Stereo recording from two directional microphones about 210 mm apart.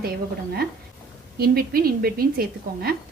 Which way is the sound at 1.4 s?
45° right (ahead or behind).